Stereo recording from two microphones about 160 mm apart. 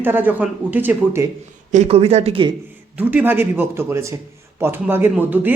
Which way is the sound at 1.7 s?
40° right (ahead or behind).